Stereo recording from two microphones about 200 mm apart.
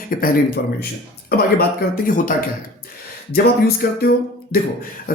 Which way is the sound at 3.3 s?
50° left (ahead or behind).